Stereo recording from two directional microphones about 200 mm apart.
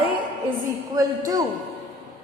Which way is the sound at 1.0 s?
15° right (ahead or behind).